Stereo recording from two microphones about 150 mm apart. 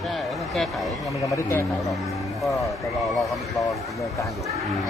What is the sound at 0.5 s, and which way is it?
Speech, centre (ahead or behind).